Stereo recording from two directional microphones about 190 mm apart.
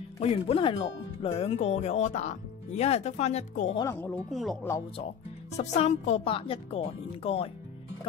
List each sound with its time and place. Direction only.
0.2 s speech: 30° left (ahead or behind)
3.8 s speech: 10° left (ahead or behind)
4.3 s speech: centre (ahead or behind)
5.6 s speech: 35° left (ahead or behind)